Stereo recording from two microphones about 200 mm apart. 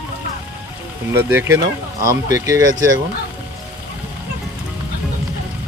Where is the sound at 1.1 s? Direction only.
10° right (ahead or behind).